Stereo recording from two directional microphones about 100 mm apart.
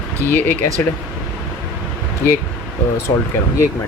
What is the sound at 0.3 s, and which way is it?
Speech, 20° left (ahead or behind).